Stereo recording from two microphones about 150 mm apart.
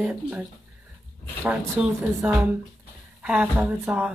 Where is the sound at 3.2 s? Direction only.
10° right (ahead or behind).